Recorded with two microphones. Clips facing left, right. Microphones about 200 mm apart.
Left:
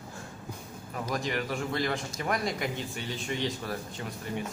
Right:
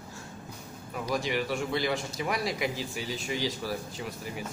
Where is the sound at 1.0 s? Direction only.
Centre (ahead or behind).